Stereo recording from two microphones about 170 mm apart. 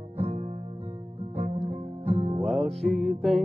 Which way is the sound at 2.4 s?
Centre (ahead or behind).